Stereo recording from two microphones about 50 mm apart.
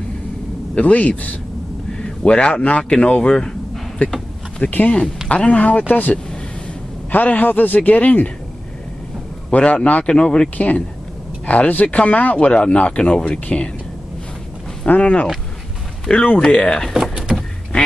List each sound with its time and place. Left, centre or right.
0.7 s speech: left
2.0 s a man's voice: centre
4.0 s a man's voice: left
9.5 s speech: left
14.9 s speech: left
16.9 s power windows: centre